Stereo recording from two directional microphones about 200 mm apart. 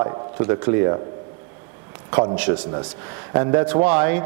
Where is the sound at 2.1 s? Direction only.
10° right (ahead or behind).